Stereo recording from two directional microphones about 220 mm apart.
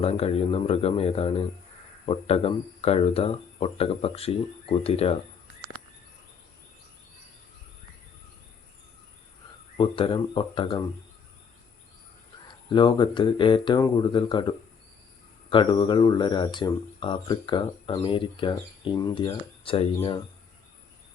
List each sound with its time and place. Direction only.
0.0 s speech: 25° left (ahead or behind)
9.7 s speech: 25° left (ahead or behind)
12.7 s speech: 20° left (ahead or behind)